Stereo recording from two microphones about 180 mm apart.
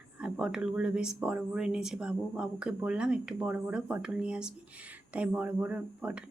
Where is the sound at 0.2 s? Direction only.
5° right (ahead or behind).